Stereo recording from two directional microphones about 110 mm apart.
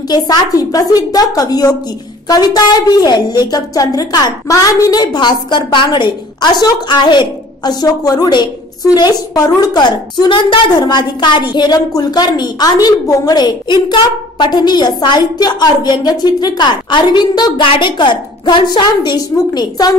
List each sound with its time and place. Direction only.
0.1 s a woman's voice: 35° left (ahead or behind)